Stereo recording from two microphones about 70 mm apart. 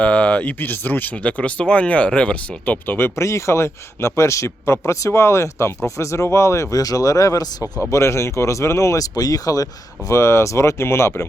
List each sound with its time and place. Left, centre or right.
0.0 s speech: centre
3.2 s speech: left
10.1 s speech: left